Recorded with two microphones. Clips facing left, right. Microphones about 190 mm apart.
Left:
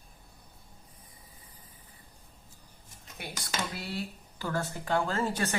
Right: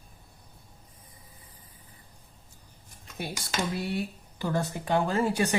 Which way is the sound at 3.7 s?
20° right (ahead or behind).